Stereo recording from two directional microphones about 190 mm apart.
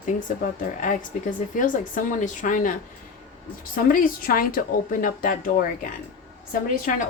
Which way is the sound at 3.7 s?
45° left (ahead or behind).